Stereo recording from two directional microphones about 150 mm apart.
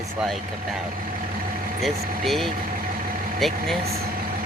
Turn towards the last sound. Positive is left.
turn(degrees=0)  # may be behind; listen again after turning